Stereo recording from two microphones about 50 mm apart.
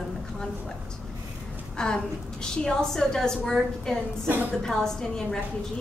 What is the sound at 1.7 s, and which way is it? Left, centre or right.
A woman's voice, centre.